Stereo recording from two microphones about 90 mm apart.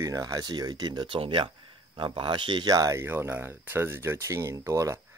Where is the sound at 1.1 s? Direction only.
80° right.